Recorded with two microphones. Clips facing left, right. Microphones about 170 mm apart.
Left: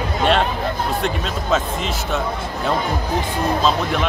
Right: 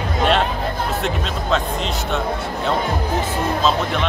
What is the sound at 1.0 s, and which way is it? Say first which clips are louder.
Speech: even; centre (ahead or behind).